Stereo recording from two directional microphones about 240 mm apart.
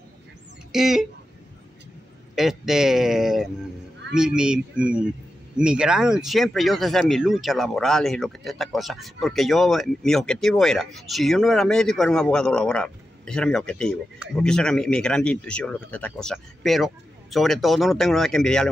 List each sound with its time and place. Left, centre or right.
0.7 s speech: centre
2.3 s speech: centre